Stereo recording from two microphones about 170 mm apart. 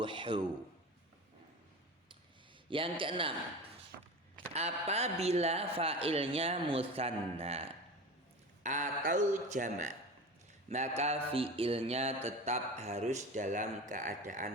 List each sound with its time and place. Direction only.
0.0 s a man's voice: 30° right (ahead or behind)
2.6 s mantra: 30° right (ahead or behind)
4.5 s mantra: 40° right (ahead or behind)
8.6 s a man's voice: 45° right (ahead or behind)
10.7 s mantra: 40° right (ahead or behind)